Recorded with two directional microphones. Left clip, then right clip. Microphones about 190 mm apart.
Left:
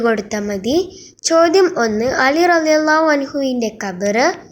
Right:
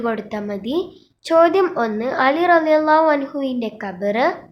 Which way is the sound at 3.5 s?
25° right (ahead or behind).